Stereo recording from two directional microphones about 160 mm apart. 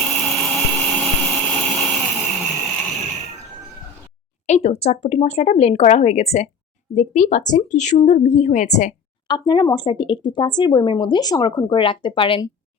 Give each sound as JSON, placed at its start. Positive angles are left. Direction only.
{"t": 0.0, "sound": "blender", "side_deg": 5}
{"t": 4.4, "sound": "a woman's voice", "side_deg": 40}
{"t": 9.2, "sound": "speech", "side_deg": 30}